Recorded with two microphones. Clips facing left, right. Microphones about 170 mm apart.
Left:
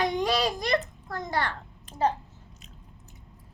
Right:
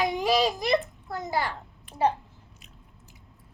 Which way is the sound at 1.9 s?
40° left (ahead or behind).